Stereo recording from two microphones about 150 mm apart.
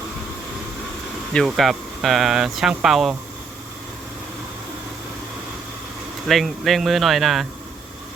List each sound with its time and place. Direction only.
1.3 s speech: centre (ahead or behind)
6.2 s speech: centre (ahead or behind)